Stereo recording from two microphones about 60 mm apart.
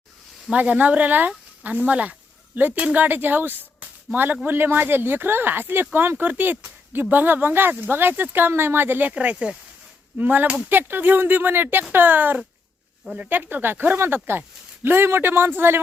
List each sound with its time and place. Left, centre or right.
0.5 s speech: right
3.8 s a sound: right
4.4 s speech: right
9.1 s speech: right
10.2 s speech: right
10.4 s speech: centre
10.7 s speech: right